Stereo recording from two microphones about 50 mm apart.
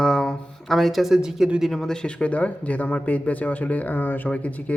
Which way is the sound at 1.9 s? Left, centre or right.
Centre.